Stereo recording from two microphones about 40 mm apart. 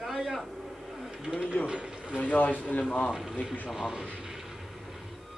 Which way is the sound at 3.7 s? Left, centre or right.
Centre.